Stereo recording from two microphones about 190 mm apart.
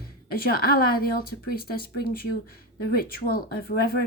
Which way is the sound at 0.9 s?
50° left (ahead or behind).